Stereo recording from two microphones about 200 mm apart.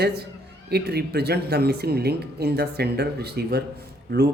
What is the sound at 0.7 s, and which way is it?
Speech, 55° right (ahead or behind).